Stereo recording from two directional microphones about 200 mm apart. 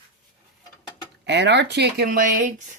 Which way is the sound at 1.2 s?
60° right (ahead or behind).